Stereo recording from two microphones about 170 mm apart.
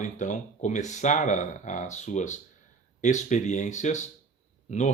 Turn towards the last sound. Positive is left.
turn(degrees=45)  # may be behind; listen again after turning